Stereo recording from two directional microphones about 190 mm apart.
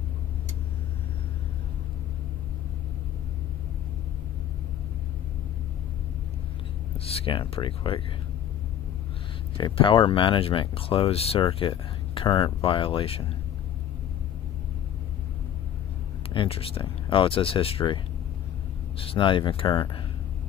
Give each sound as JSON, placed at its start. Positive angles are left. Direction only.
{"t": 7.1, "sound": "speech", "side_deg": 30}
{"t": 9.6, "sound": "speech", "side_deg": 25}
{"t": 16.3, "sound": "speech", "side_deg": 30}